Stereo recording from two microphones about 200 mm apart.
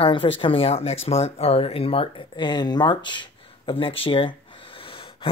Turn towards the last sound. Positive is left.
turn(degrees=25)  # may be behind; listen again after turning